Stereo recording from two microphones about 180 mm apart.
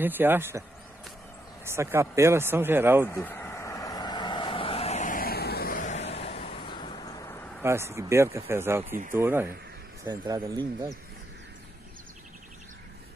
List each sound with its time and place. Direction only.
0.0 s speech: 10° right (ahead or behind)
3.1 s vehicle: 10° left (ahead or behind)
7.6 s speech: 15° right (ahead or behind)